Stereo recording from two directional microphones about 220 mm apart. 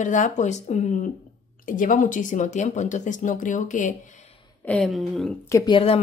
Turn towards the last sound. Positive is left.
turn(degrees=20)  # may be behind; listen again after turning